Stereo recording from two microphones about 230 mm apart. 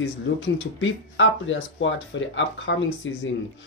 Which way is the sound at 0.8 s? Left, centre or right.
Left.